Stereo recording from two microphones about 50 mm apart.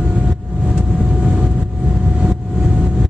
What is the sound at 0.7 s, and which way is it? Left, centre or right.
Vehicle, centre.